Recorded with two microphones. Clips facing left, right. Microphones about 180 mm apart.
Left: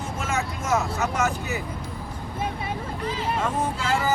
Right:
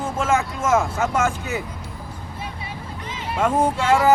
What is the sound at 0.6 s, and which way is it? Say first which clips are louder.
Vehicle: right 5 dB; 50° right (ahead or behind).